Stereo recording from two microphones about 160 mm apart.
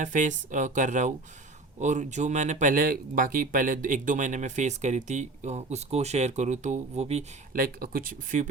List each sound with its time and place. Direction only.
0.0 s speech: 50° right (ahead or behind)
7.5 s speech: 65° right (ahead or behind)